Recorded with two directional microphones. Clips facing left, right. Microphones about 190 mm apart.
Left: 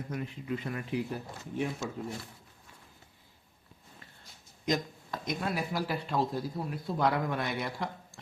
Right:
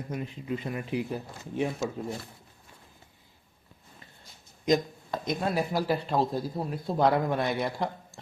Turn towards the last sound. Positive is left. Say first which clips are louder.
# right 5 dB
turn(degrees=-30)  # may be behind; listen again after turning